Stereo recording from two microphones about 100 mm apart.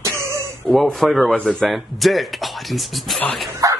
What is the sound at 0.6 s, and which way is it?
Speech, centre (ahead or behind).